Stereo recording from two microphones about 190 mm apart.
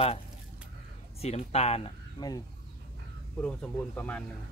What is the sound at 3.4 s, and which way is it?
Speech, 5° left (ahead or behind).